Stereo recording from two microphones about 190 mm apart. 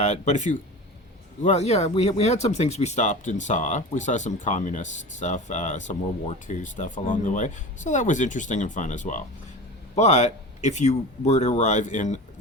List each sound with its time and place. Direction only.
0.0 s speech: 35° left (ahead or behind)